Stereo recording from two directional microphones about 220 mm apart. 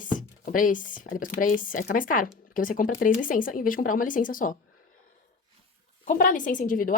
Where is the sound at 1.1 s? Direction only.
40° left (ahead or behind).